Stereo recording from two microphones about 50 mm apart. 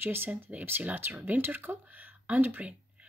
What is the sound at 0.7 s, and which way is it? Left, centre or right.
Speech, right.